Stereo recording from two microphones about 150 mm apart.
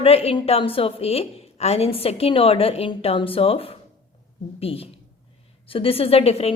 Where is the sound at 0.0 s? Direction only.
40° left (ahead or behind).